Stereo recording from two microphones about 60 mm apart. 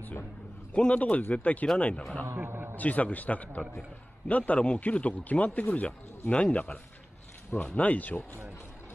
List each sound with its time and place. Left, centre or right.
0.7 s a man's voice: left
2.3 s a sound: right
2.7 s a man's voice: left